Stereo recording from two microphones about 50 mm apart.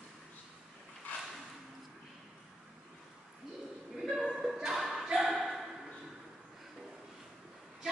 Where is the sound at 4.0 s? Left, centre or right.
Centre.